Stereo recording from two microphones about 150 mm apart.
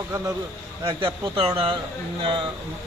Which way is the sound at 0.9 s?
35° right (ahead or behind).